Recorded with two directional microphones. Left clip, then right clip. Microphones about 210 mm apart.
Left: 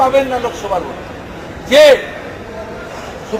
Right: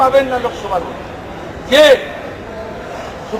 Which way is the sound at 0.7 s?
Centre (ahead or behind).